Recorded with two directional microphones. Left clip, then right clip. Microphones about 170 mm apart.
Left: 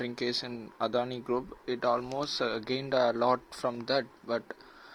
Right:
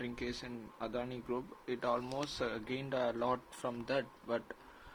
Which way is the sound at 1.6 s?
30° left (ahead or behind).